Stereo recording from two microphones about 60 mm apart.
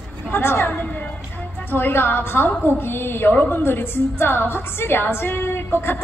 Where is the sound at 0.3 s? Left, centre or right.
Left.